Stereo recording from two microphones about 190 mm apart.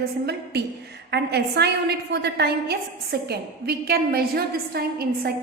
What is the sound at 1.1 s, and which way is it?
A woman's voice, 60° right (ahead or behind).